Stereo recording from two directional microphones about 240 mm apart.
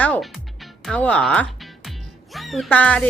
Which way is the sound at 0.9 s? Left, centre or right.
Centre.